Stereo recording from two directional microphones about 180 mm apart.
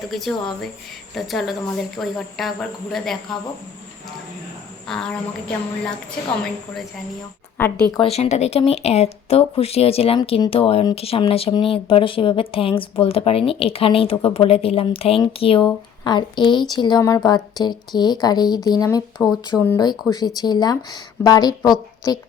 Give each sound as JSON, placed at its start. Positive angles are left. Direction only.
{"t": 0.1, "sound": "speech", "side_deg": 0}
{"t": 4.9, "sound": "speech", "side_deg": 5}
{"t": 7.6, "sound": "speech", "side_deg": 5}
{"t": 8.1, "sound": "speech", "side_deg": 35}
{"t": 19.2, "sound": "speech", "side_deg": -5}
{"t": 19.8, "sound": "speech", "side_deg": 20}